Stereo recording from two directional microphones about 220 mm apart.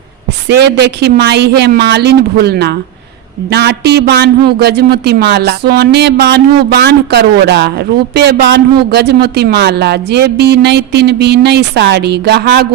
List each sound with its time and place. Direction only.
0.4 s a man's voice: 50° right (ahead or behind)